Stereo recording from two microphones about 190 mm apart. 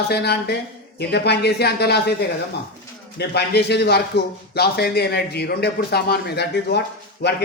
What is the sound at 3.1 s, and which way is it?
Speech, 60° left (ahead or behind).